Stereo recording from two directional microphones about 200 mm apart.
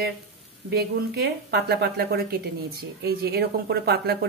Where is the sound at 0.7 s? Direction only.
55° right (ahead or behind).